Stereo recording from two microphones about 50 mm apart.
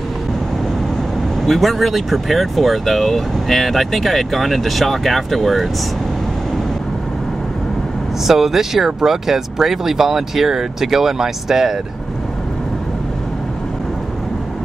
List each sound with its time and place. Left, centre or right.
1.4 s speech: centre
8.3 s speech: centre